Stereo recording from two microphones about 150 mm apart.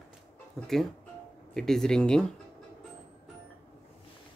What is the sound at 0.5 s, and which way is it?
Speech, centre (ahead or behind).